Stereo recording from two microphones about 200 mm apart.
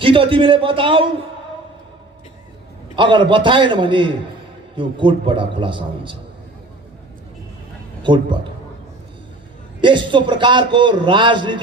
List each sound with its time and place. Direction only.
0.0 s a man's voice: 25° right (ahead or behind)
2.9 s a man's voice: 25° right (ahead or behind)
8.0 s a man's voice: 25° right (ahead or behind)
9.8 s a man's voice: 25° right (ahead or behind)